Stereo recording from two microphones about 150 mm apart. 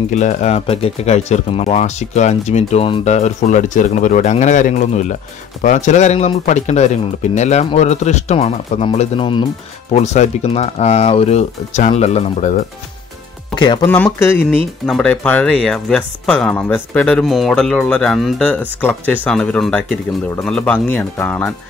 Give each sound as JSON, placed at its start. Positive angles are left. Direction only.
{"t": 0.1, "sound": "speech", "side_deg": 50}
{"t": 9.9, "sound": "speech", "side_deg": 50}
{"t": 13.6, "sound": "speech", "side_deg": 30}
{"t": 13.8, "sound": "speech", "side_deg": 15}